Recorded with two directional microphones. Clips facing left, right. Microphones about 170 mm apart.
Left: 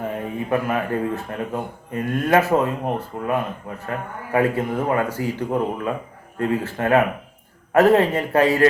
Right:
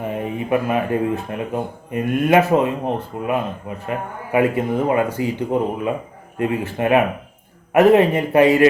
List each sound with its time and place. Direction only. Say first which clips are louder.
0.0 s speech: right 2 dB; 20° right (ahead or behind)